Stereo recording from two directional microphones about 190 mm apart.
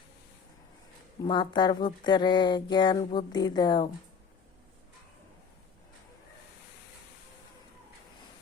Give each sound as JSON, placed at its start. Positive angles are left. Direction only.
{"t": 1.2, "sound": "speech", "side_deg": 25}